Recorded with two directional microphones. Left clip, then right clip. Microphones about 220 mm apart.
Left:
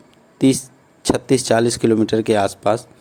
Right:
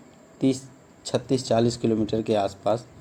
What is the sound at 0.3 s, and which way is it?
Speech, 45° left (ahead or behind).